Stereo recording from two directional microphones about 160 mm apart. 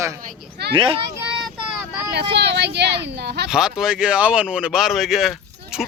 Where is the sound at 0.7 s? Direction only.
35° right (ahead or behind).